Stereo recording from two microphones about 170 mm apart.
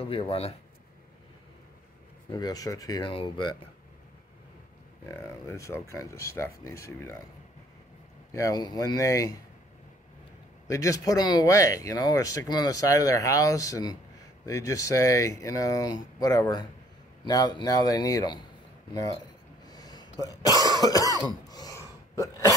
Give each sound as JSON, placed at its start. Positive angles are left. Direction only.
{"t": 0.0, "sound": "speech", "side_deg": 35}
{"t": 2.3, "sound": "speech", "side_deg": 20}
{"t": 5.0, "sound": "speech", "side_deg": 15}
{"t": 8.3, "sound": "speech", "side_deg": 20}
{"t": 10.7, "sound": "speech", "side_deg": 20}
{"t": 19.6, "sound": "cough", "side_deg": 25}
{"t": 21.5, "sound": "gasp", "side_deg": 20}